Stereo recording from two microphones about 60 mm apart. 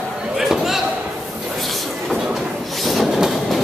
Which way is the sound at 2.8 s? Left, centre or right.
Centre.